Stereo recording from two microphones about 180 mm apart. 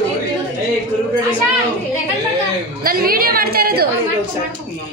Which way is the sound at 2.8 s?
55° right (ahead or behind).